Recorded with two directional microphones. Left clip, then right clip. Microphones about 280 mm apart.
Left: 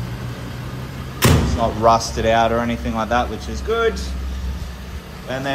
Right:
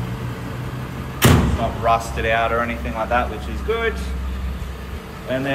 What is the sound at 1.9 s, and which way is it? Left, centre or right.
Speech, centre.